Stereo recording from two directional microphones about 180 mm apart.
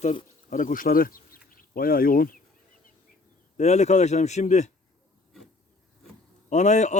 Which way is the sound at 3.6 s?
40° left (ahead or behind).